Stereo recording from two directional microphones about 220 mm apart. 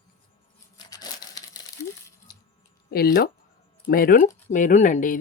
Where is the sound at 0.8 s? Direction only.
15° left (ahead or behind).